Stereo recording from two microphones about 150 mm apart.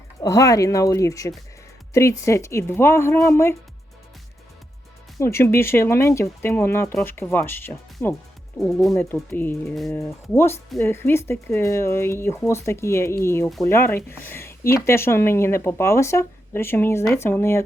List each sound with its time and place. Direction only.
0.2 s speech: 20° left (ahead or behind)
5.2 s speech: 15° left (ahead or behind)
8.5 s speech: 5° left (ahead or behind)
8.9 s speech: 15° left (ahead or behind)